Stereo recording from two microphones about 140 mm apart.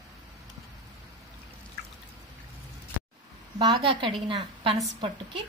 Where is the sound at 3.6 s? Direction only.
35° right (ahead or behind).